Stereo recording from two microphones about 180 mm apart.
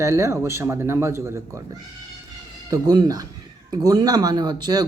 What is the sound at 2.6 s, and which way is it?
Speech, 20° right (ahead or behind).